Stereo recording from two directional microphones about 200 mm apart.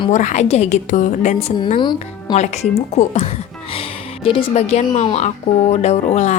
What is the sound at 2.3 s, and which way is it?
Speech, 35° left (ahead or behind).